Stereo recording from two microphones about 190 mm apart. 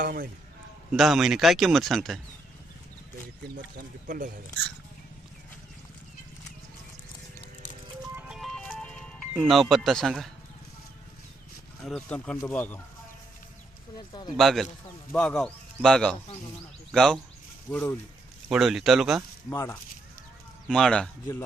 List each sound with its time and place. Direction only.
0.0 s speech: 50° right (ahead or behind)
0.9 s speech: centre (ahead or behind)
4.0 s speech: 45° right (ahead or behind)
8.3 s music: centre (ahead or behind)
9.3 s speech: 5° right (ahead or behind)
11.9 s speech: 5° left (ahead or behind)
13.9 s speech: 25° left (ahead or behind)
14.3 s speech: centre (ahead or behind)
18.4 s speech: 5° right (ahead or behind)
19.5 s speech: 15° left (ahead or behind)
20.7 s speech: centre (ahead or behind)